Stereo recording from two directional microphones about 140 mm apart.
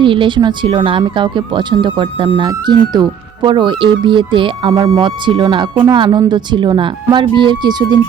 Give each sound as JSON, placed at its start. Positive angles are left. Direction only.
{"t": 0.0, "sound": "speech", "side_deg": -35}